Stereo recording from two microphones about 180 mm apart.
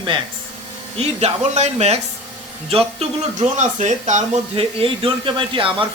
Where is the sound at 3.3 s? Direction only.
40° right (ahead or behind).